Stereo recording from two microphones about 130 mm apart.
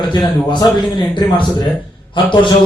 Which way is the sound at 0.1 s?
35° left (ahead or behind).